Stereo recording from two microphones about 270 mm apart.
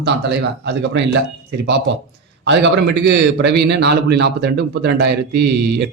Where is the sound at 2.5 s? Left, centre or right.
Right.